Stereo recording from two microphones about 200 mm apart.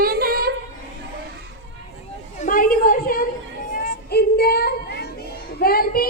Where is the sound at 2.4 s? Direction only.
45° left (ahead or behind).